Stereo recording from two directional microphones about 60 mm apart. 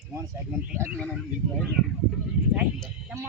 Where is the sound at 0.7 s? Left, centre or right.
Right.